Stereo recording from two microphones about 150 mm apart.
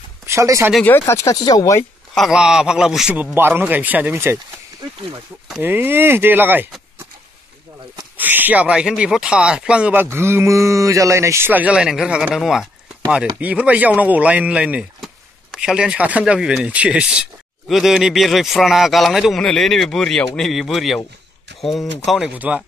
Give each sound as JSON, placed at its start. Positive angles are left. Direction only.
{"t": 0.3, "sound": "speech", "side_deg": -20}
{"t": 0.8, "sound": "speech", "side_deg": 15}
{"t": 2.1, "sound": "speech", "side_deg": 0}
{"t": 5.6, "sound": "speech", "side_deg": -15}
{"t": 8.2, "sound": "speech", "side_deg": -10}